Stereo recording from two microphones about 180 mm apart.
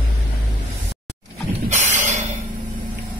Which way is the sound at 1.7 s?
40° right (ahead or behind).